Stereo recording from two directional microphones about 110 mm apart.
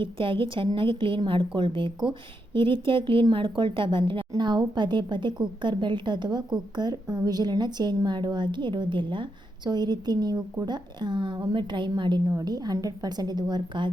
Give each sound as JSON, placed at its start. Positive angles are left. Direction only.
{"t": 0.0, "sound": "a woman's voice", "side_deg": -50}